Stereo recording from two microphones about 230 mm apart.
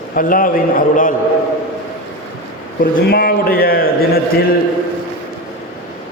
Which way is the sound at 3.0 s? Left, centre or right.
Left.